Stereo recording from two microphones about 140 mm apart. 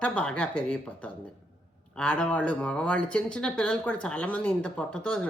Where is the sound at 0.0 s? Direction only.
5° left (ahead or behind).